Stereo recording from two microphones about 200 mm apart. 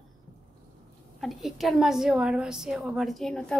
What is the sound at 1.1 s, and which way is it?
A woman's voice, centre (ahead or behind).